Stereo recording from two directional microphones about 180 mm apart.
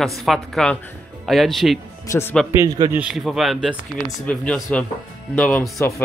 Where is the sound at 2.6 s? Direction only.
25° right (ahead or behind).